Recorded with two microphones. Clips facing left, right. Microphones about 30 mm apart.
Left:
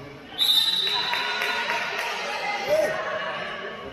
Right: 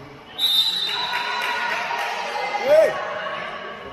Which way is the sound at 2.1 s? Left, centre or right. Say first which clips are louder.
Right 3 dB; centre.